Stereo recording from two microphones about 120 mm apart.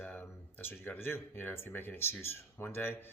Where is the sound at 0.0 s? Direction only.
15° left (ahead or behind).